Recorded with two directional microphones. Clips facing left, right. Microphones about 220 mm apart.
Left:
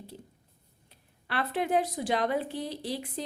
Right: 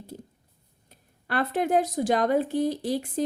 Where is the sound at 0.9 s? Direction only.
45° right (ahead or behind).